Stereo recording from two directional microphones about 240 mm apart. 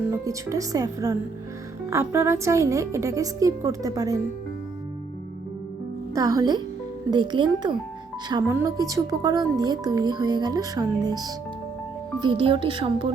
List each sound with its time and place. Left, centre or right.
0.3 s speech: centre
6.1 s speech: centre